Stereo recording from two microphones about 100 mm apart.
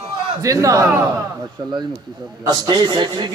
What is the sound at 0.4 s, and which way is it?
Speech, 35° right (ahead or behind).